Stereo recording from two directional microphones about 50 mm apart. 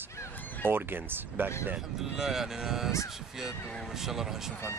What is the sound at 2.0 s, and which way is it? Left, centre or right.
Speech, centre.